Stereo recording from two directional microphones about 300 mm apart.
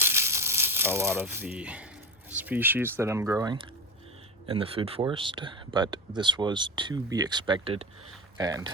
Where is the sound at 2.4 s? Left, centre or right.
Centre.